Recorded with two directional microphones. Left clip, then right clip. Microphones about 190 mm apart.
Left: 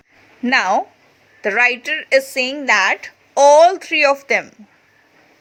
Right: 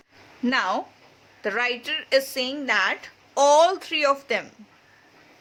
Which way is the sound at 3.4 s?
15° left (ahead or behind).